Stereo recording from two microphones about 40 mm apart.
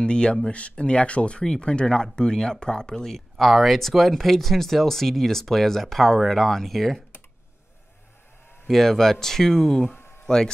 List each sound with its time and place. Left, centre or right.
0.0 s speech: left
3.2 s speech: centre
8.6 s speech: centre